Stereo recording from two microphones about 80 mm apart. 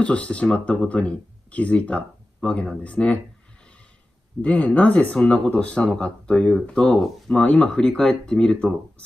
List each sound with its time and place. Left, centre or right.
0.0 s speech: centre
4.4 s speech: centre